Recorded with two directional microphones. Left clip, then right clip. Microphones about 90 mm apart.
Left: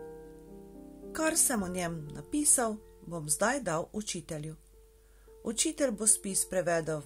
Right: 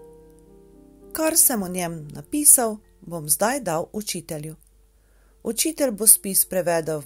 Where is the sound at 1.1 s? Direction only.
35° right (ahead or behind).